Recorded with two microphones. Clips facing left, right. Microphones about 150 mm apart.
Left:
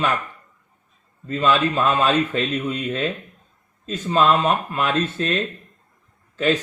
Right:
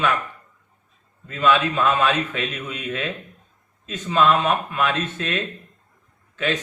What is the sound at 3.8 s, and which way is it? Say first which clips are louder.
A man's voice: left 1 dB; 35° left (ahead or behind).